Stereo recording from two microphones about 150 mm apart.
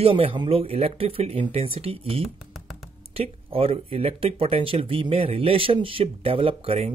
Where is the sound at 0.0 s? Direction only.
40° right (ahead or behind).